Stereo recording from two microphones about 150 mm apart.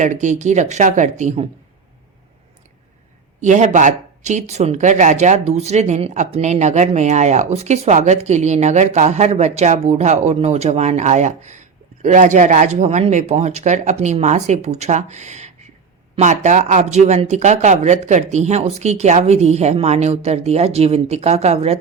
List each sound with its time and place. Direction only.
0.0 s speech: 55° right (ahead or behind)
3.4 s speech: 55° right (ahead or behind)